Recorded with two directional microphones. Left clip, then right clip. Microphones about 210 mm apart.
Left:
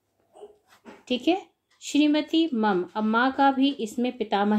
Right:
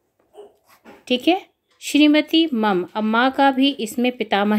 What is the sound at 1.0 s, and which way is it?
Speech, 25° right (ahead or behind).